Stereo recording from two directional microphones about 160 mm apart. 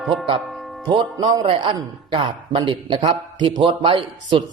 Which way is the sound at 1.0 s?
30° right (ahead or behind).